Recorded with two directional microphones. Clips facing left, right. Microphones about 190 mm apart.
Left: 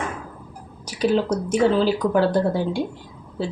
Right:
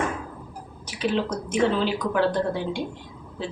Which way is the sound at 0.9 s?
40° left (ahead or behind).